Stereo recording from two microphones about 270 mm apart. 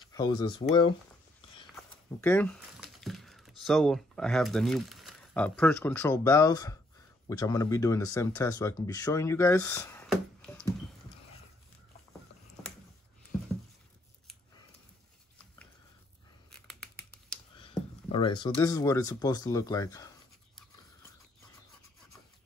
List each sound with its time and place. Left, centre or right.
0.1 s speech: centre
16.5 s scissors: centre
17.6 s speech: centre